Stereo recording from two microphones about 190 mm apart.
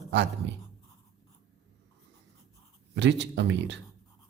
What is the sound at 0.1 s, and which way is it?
Speech, 65° right (ahead or behind).